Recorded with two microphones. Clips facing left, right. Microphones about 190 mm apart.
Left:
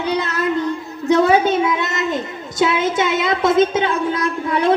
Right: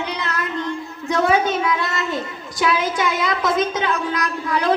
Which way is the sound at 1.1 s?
20° left (ahead or behind).